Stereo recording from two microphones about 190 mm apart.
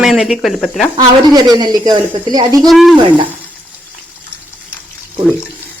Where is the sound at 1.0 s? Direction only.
20° right (ahead or behind).